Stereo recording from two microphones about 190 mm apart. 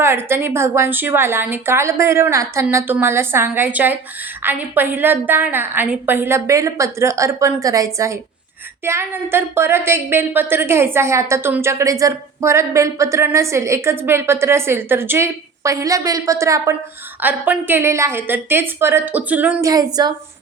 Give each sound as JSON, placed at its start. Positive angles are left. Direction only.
{"t": 0.0, "sound": "a woman's voice", "side_deg": -15}
{"t": 19.7, "sound": "a woman's voice", "side_deg": -20}